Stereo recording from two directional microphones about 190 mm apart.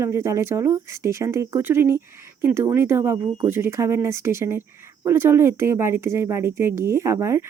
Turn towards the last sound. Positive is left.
turn(degrees=-15)  # may be behind; listen again after turning